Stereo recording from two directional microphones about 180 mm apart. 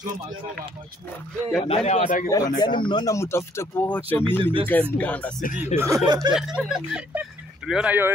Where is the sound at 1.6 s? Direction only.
35° left (ahead or behind).